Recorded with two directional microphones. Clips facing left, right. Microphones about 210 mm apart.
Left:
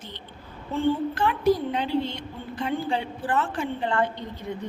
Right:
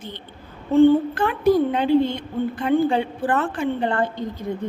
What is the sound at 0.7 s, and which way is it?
A woman's voice, 55° right (ahead or behind).